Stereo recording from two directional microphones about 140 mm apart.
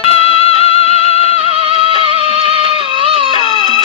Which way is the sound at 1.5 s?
40° right (ahead or behind).